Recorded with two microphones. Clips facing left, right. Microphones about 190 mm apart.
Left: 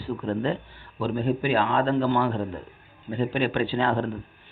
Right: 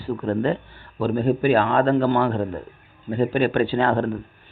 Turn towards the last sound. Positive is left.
turn(degrees=-55)  # may be behind; listen again after turning